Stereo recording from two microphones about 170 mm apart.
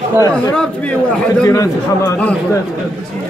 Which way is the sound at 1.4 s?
20° left (ahead or behind).